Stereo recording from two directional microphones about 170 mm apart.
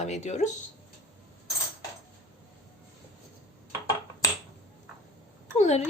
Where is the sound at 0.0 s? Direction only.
40° left (ahead or behind).